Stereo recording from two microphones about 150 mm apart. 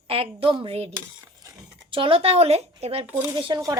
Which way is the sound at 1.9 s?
35° right (ahead or behind).